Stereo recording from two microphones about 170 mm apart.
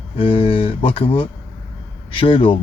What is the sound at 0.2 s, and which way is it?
Speech, 35° left (ahead or behind).